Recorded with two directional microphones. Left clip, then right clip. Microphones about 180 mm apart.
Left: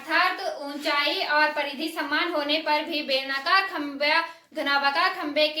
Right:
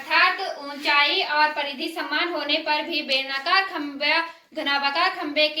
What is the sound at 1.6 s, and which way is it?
A woman's voice, 35° left (ahead or behind).